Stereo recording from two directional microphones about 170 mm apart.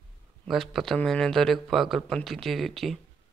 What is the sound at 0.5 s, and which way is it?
A man's voice, centre (ahead or behind).